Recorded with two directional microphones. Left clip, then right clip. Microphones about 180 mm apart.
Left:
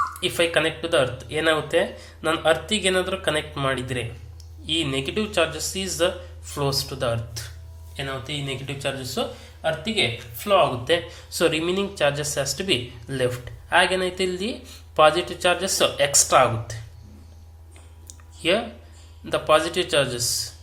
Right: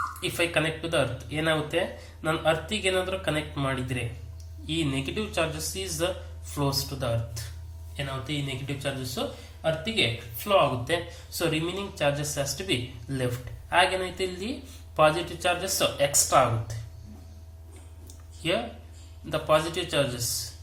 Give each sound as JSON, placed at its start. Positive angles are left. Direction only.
{"t": 0.2, "sound": "speech", "side_deg": 15}
{"t": 19.2, "sound": "speech", "side_deg": 20}